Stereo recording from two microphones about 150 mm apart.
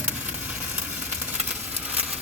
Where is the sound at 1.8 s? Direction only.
10° right (ahead or behind).